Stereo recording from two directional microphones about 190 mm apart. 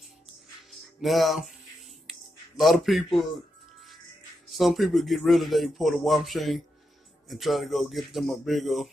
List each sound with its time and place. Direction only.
0.7 s music: centre (ahead or behind)
2.0 s a sound: centre (ahead or behind)
4.5 s speech: centre (ahead or behind)